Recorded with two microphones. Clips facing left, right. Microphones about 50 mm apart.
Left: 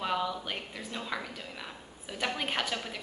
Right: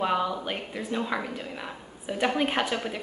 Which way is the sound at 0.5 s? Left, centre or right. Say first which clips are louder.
Right 7 dB; centre.